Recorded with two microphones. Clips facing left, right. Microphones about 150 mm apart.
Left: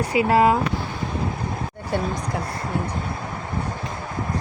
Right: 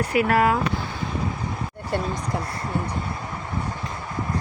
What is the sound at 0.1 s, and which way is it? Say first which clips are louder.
Speech: left 3 dB; 20° left (ahead or behind).